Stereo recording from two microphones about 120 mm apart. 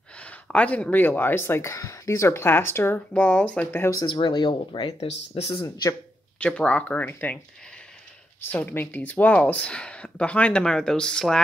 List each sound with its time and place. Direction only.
0.2 s speech: 10° left (ahead or behind)
4.0 s speech: 40° left (ahead or behind)
6.4 s speech: 10° left (ahead or behind)
8.5 s speech: 15° left (ahead or behind)